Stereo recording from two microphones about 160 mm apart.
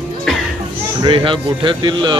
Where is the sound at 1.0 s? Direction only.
30° right (ahead or behind).